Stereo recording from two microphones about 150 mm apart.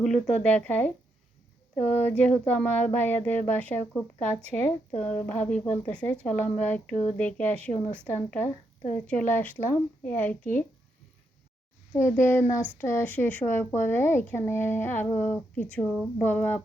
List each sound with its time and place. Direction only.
0.0 s a woman's voice: 5° left (ahead or behind)
11.9 s a woman's voice: 15° left (ahead or behind)